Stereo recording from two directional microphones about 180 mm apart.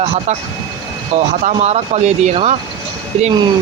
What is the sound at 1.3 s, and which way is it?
Speech, 40° right (ahead or behind).